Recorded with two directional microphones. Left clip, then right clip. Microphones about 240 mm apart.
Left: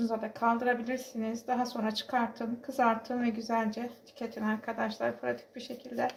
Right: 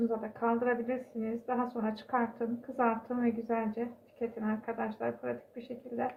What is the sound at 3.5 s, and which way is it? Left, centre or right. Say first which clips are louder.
Speech: left 2 dB; left.